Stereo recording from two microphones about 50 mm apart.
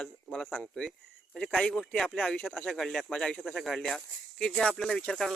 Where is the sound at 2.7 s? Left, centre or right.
Centre.